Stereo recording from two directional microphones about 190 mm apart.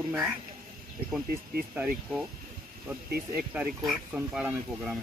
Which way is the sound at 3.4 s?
5° right (ahead or behind).